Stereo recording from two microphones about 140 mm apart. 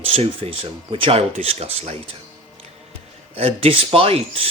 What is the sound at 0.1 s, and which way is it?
Speech, 40° right (ahead or behind).